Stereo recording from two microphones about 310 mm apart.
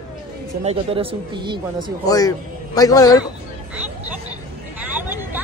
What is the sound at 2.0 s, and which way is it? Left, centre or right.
A man's voice, centre.